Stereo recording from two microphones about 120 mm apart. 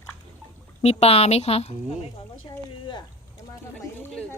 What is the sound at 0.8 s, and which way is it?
Speech, 60° left (ahead or behind).